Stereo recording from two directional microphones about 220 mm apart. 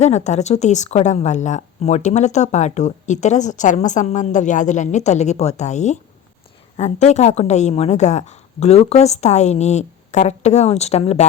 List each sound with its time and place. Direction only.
0.0 s a woman's voice: 30° left (ahead or behind)